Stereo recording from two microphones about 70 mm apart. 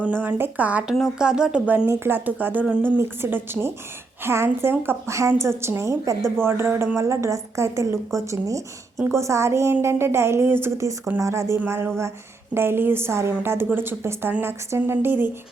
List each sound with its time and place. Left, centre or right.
0.1 s speech: right
1.2 s speech: centre
1.6 s a woman's voice: right
6.4 s a woman's voice: right
11.2 s a woman's voice: right